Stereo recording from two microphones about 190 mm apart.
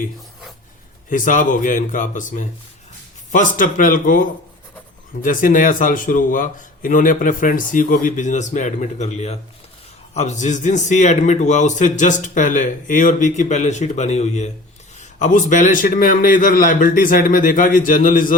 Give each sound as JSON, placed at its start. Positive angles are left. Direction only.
{"t": 1.1, "sound": "speech", "side_deg": 45}
{"t": 5.2, "sound": "a man's voice", "side_deg": 45}